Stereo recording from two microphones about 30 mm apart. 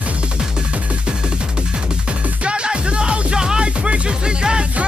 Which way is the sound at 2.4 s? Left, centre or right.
Right.